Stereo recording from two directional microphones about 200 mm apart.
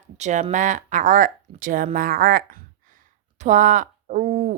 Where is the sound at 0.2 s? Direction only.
35° right (ahead or behind).